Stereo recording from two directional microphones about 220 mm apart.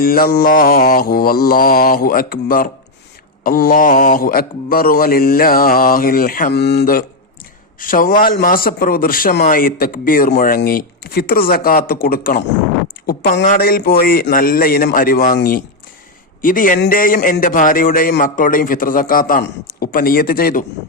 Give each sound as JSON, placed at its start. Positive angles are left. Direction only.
{"t": 0.0, "sound": "a man's voice", "side_deg": 40}